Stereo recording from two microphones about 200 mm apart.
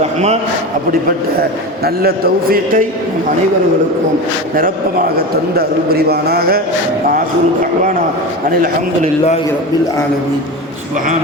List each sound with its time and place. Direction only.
0.0 s a sound: 35° right (ahead or behind)
1.4 s a man's voice: 50° right (ahead or behind)
5.1 s a man's voice: 50° right (ahead or behind)